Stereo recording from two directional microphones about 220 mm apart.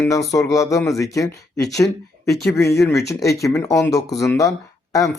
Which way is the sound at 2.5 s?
15° left (ahead or behind).